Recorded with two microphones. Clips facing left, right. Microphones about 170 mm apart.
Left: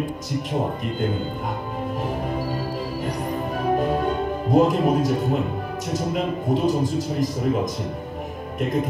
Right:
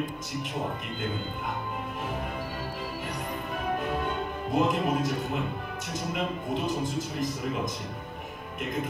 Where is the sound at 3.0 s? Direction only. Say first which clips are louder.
Left 8 dB; 35° left (ahead or behind).